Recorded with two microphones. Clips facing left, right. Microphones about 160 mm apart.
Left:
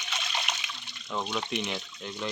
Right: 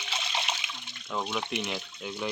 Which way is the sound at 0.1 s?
30° right (ahead or behind).